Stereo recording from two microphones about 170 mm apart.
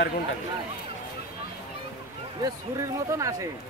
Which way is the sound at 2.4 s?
20° right (ahead or behind).